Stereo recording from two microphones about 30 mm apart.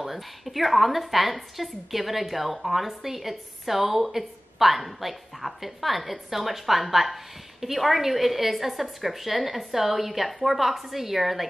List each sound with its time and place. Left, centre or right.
0.0 s a woman's voice: centre